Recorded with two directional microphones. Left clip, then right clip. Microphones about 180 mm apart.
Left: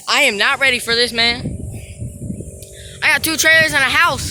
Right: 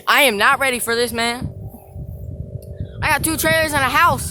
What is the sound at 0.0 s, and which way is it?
Speech, 15° right (ahead or behind).